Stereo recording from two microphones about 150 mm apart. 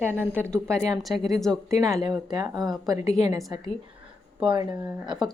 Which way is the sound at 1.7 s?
20° right (ahead or behind).